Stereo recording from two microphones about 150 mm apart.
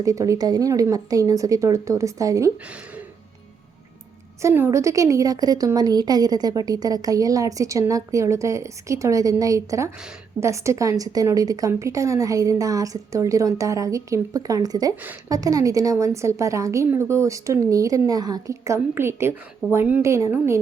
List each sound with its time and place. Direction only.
0.0 s a woman's voice: 20° right (ahead or behind)
4.4 s a woman's voice: 15° right (ahead or behind)